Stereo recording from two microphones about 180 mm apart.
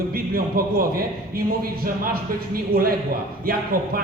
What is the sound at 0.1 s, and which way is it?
Speech, 55° right (ahead or behind).